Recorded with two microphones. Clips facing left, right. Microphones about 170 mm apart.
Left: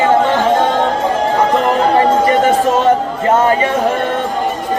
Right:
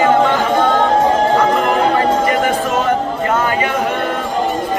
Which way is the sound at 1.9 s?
30° left (ahead or behind).